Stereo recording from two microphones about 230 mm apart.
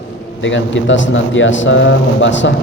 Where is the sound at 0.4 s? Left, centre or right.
Left.